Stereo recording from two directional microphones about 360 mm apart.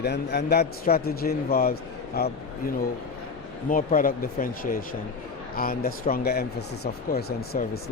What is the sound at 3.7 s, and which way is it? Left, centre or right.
Speech, left.